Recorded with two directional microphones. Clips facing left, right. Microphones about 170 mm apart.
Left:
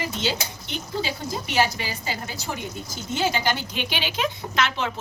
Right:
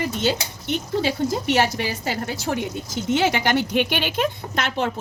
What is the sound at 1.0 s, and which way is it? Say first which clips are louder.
A woman's voice: right 8 dB; 70° right (ahead or behind).